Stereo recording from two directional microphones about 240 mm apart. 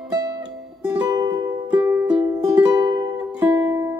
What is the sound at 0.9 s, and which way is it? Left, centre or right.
Music, centre.